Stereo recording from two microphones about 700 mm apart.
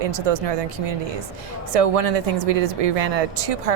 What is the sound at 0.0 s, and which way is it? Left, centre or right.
Speech, right.